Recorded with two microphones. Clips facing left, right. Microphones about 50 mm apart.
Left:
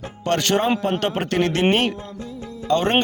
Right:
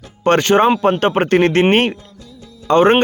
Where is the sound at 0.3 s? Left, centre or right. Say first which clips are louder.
Right 7 dB; right.